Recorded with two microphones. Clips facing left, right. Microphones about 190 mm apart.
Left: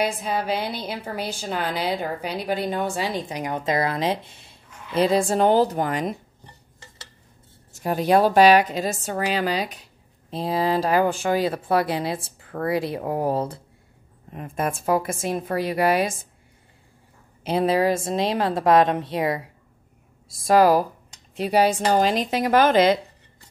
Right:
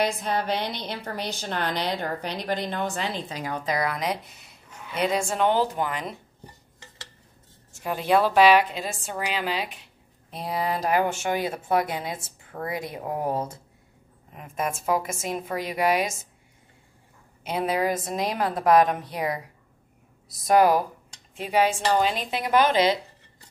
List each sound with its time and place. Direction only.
0.0 s a woman's voice: 5° left (ahead or behind); by 6.1 s 45° left (ahead or behind)
7.7 s speech: 40° left (ahead or behind)
10.3 s speech: 30° left (ahead or behind)
17.4 s a woman's voice: 30° left (ahead or behind)
20.2 s a woman's voice: 30° left (ahead or behind); by 22.9 s 50° left (ahead or behind)